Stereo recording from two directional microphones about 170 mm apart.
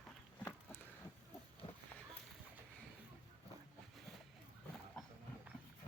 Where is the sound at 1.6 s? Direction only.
35° left (ahead or behind).